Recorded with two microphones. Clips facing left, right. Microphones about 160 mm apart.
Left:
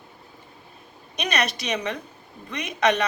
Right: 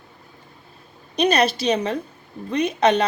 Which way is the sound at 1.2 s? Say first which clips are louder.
Right 8 dB; 30° right (ahead or behind).